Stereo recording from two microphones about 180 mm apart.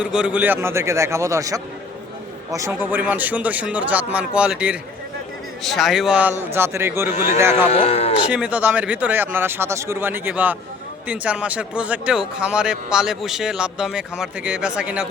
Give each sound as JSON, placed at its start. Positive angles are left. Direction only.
{"t": 0.0, "sound": "a man's voice", "side_deg": -5}
{"t": 7.7, "sound": "speech", "side_deg": 35}
{"t": 8.3, "sound": "a man's voice", "side_deg": -5}